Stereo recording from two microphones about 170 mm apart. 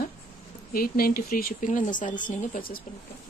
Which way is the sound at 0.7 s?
60° left (ahead or behind).